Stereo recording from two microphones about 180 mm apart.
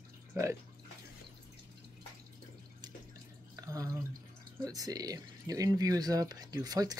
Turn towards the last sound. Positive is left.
turn(degrees=-20)  # may be behind; listen again after turning